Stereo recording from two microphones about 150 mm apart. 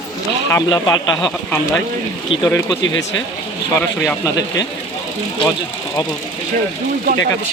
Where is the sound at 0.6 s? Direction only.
30° left (ahead or behind).